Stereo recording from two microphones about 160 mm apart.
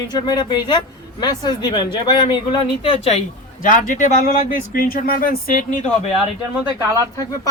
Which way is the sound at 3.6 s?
55° left (ahead or behind).